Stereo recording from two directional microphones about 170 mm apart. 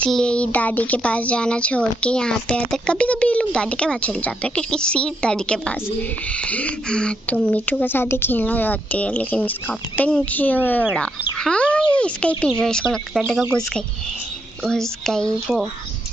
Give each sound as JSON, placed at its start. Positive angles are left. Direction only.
{"t": 0.0, "sound": "speech", "side_deg": 5}
{"t": 14.6, "sound": "speech", "side_deg": 5}